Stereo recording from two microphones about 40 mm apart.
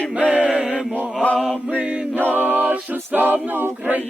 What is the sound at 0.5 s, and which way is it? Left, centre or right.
Mantra, right.